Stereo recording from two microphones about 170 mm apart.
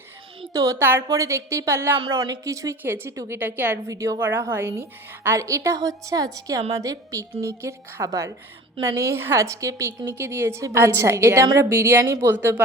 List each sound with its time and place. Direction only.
0.5 s a woman's voice: 20° right (ahead or behind)
2.0 s a woman's voice: 25° right (ahead or behind)